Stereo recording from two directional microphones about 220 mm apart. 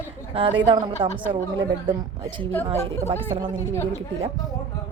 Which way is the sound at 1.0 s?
20° right (ahead or behind).